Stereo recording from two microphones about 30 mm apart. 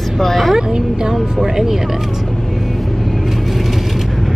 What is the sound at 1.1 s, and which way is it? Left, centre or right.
Speech, centre.